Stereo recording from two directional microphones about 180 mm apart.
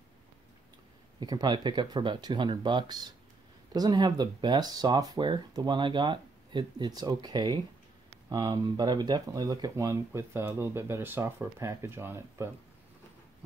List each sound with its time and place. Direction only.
1.2 s speech: 20° right (ahead or behind)